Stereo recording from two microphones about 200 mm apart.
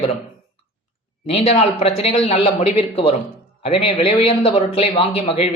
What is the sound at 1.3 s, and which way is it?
A man's voice, 30° left (ahead or behind).